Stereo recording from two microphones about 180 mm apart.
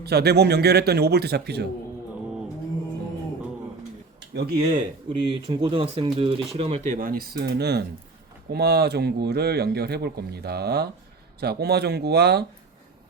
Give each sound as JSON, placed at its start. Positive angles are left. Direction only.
{"t": 0.0, "sound": "speech", "side_deg": -65}
{"t": 4.2, "sound": "speech", "side_deg": -70}
{"t": 5.0, "sound": "speech", "side_deg": -25}